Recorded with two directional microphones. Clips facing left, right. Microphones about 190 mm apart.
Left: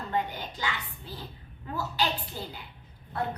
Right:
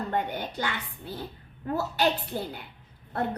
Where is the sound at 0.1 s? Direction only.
55° right (ahead or behind).